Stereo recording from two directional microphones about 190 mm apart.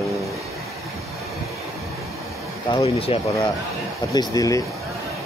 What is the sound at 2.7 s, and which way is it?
Speech, 25° left (ahead or behind).